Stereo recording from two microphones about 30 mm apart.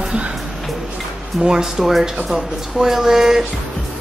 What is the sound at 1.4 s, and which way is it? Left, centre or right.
Speech, right.